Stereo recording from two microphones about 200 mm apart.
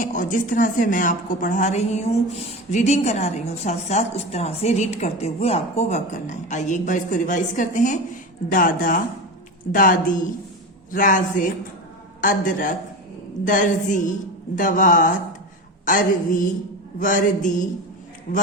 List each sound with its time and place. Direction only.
0.0 s a woman's voice: 40° left (ahead or behind)